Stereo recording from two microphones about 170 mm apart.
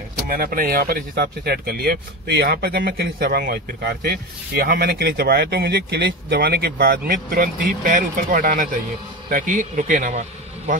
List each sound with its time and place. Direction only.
0.3 s speech: 60° right (ahead or behind)